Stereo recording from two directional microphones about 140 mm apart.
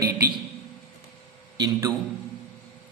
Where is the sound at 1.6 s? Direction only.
30° right (ahead or behind).